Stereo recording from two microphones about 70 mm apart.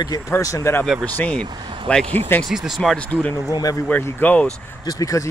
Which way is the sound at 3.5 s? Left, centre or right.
Left.